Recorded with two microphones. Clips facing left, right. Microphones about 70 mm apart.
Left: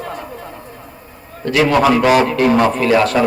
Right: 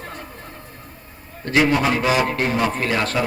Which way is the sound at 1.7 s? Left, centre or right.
Left.